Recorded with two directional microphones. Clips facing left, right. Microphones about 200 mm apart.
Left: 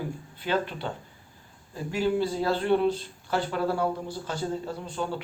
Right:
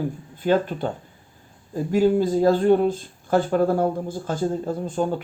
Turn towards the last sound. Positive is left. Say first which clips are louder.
# right 8 dB
turn(degrees=-45)  # may be behind; listen again after turning